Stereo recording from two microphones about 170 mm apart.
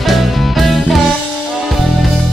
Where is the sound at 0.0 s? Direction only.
Centre (ahead or behind).